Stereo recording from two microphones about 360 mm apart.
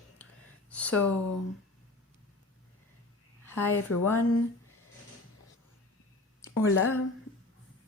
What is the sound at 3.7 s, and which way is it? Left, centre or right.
Speech, left.